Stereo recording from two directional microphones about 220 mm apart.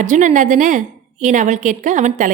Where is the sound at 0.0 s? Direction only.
35° right (ahead or behind).